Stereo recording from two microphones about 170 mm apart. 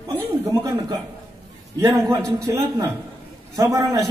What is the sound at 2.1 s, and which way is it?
A man's voice, 20° right (ahead or behind).